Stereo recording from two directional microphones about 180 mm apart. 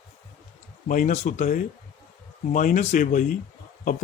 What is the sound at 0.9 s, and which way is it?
Speech, 45° left (ahead or behind).